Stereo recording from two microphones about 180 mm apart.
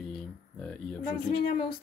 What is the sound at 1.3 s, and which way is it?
Speech, 65° left (ahead or behind).